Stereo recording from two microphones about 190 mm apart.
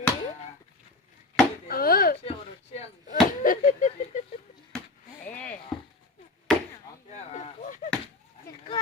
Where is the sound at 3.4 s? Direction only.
45° left (ahead or behind).